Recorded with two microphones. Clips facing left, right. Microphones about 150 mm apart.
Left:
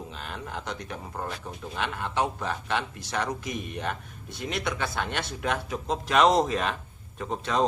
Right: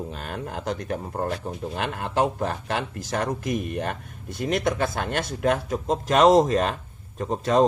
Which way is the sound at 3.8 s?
45° right (ahead or behind).